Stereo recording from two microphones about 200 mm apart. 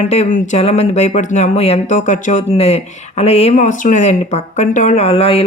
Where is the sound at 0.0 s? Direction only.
35° left (ahead or behind).